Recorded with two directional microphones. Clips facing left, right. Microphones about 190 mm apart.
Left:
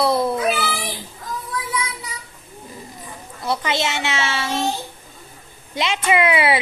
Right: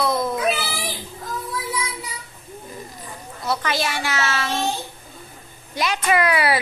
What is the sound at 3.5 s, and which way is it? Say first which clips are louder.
A child's voice: left 1 dB; 25° left (ahead or behind).